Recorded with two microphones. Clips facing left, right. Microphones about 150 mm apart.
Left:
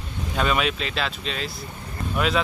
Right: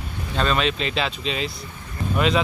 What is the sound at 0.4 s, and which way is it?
Speech, 10° left (ahead or behind).